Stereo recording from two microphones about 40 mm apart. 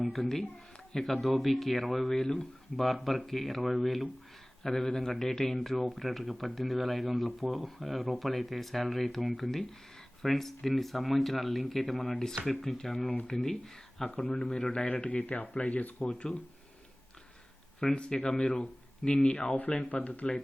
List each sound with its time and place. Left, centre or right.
0.1 s speech: centre
2.2 s speech: centre
2.7 s speech: centre
4.6 s speech: centre
5.5 s speech: centre
14.5 s speech: left
16.0 s speech: left
17.9 s speech: left
18.2 s speech: centre
18.4 s speech: left
20.1 s speech: left